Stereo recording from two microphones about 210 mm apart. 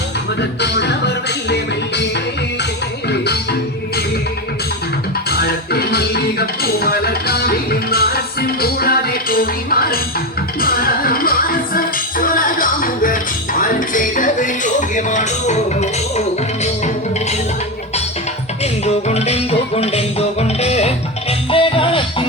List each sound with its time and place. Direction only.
0.6 s music: 55° left (ahead or behind)
5.3 s music: 50° left (ahead or behind); by 16.2 s 30° left (ahead or behind)
18.6 s music: 30° left (ahead or behind)